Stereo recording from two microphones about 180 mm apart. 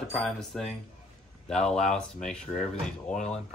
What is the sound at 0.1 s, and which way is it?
A man's voice, centre (ahead or behind).